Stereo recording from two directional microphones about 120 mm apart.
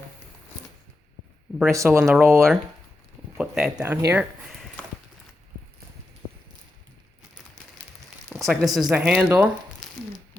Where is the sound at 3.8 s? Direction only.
15° right (ahead or behind).